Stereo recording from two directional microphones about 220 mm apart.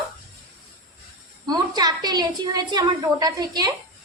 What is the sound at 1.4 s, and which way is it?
A woman's voice, 15° right (ahead or behind).